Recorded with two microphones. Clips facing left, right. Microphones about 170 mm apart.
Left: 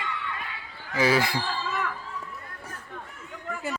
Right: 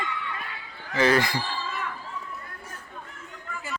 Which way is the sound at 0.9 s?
5° left (ahead or behind).